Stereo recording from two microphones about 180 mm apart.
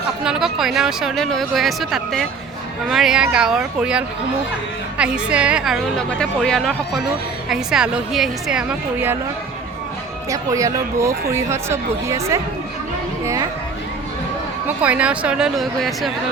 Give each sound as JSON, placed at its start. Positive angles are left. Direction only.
{"t": 0.3, "sound": "a woman's voice", "side_deg": 0}
{"t": 10.2, "sound": "speech", "side_deg": -20}
{"t": 14.8, "sound": "a woman's voice", "side_deg": -5}